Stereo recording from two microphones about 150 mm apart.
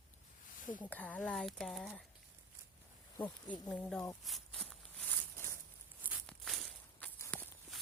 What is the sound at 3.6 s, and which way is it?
Speech, 10° left (ahead or behind).